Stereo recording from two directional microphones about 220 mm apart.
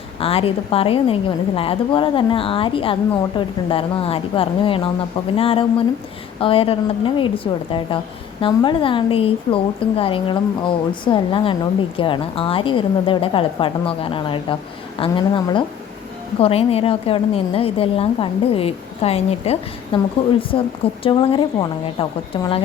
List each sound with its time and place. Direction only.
0.2 s a woman's voice: 25° left (ahead or behind)